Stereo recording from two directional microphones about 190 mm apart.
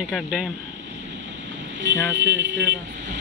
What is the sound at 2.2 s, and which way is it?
Speech, 70° right (ahead or behind).